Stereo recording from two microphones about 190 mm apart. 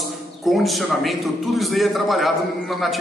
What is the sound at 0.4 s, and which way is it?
A man's voice, centre (ahead or behind).